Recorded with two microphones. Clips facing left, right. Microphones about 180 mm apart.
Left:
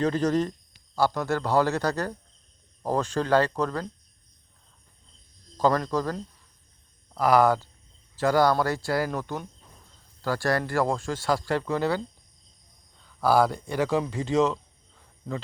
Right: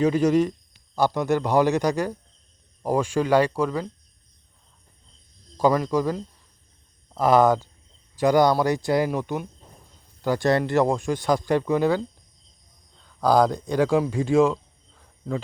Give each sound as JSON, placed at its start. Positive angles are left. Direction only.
{"t": 0.0, "sound": "speech", "side_deg": -10}
{"t": 5.5, "sound": "speech", "side_deg": -10}
{"t": 13.2, "sound": "speech", "side_deg": -15}